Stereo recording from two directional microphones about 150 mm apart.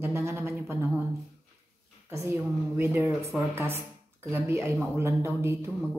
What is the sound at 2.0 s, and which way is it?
A woman's voice, 20° right (ahead or behind).